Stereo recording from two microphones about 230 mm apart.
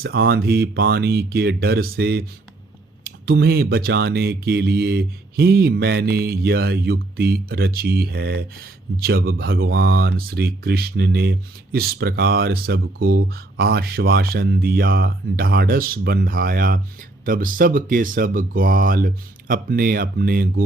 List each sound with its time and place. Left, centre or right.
0.0 s speech: right